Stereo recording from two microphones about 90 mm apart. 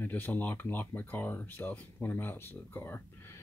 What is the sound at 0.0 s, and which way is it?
Speech, 20° left (ahead or behind).